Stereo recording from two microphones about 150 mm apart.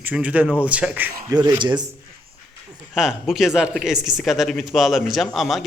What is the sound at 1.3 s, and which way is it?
Speech, 30° right (ahead or behind).